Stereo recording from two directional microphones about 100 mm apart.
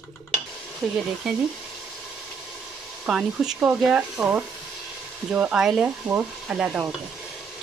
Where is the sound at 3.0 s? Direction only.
5° right (ahead or behind).